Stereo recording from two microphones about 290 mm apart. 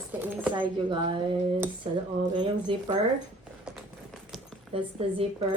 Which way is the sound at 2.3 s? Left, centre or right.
Centre.